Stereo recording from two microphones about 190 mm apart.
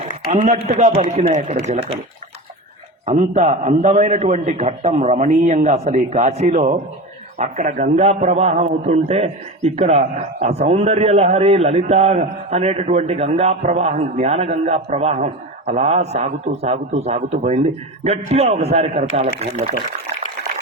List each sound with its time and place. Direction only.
0.3 s a man's voice: 35° right (ahead or behind)
3.3 s a man's voice: 35° right (ahead or behind)